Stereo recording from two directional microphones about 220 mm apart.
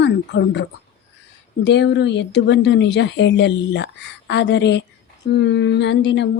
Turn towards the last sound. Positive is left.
turn(degrees=55)  # may be behind; listen again after turning